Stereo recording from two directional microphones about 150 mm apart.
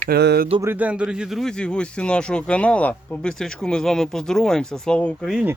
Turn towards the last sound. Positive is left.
turn(degrees=0)  # may be behind; listen again after turning